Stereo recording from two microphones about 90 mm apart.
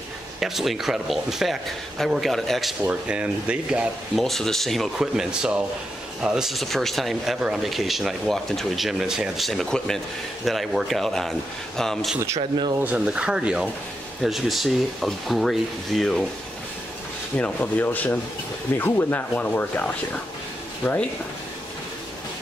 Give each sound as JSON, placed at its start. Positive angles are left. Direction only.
{"t": 0.4, "sound": "speech", "side_deg": -5}
{"t": 2.9, "sound": "speech", "side_deg": -10}
{"t": 4.1, "sound": "speech", "side_deg": 5}
{"t": 12.4, "sound": "speech", "side_deg": -60}
{"t": 12.8, "sound": "speech", "side_deg": -10}
{"t": 17.4, "sound": "speech", "side_deg": 20}